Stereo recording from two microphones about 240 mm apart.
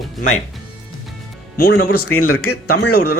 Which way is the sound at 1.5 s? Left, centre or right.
Left.